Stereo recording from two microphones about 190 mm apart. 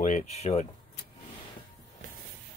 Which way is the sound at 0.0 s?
40° left (ahead or behind).